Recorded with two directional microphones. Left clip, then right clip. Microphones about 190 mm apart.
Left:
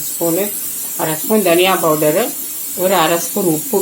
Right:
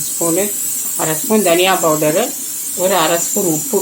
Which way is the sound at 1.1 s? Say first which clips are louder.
Even; 5° right (ahead or behind).